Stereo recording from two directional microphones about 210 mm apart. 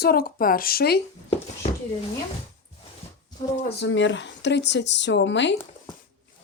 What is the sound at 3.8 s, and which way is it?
Speech, 60° left (ahead or behind).